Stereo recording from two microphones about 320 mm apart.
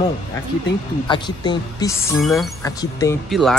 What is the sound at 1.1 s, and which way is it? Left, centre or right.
Speech, centre.